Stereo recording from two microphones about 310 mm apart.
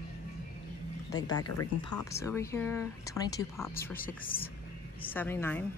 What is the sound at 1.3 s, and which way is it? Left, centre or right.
Speech, left.